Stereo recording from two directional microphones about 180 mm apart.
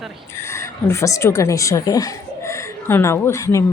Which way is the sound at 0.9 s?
15° left (ahead or behind).